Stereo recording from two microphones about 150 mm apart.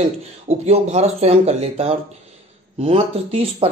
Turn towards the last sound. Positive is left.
turn(degrees=-40)  # may be behind; listen again after turning